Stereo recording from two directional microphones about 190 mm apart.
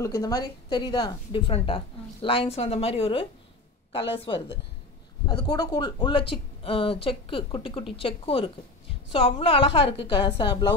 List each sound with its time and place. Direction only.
0.0 s a woman's voice: 20° left (ahead or behind)
5.4 s speech: 20° left (ahead or behind)